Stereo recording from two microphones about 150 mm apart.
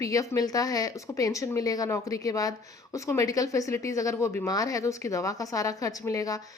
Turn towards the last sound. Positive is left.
turn(degrees=25)  # may be behind; listen again after turning